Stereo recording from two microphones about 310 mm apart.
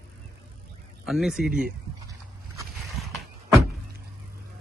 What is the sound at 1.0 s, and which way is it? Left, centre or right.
Speech, centre.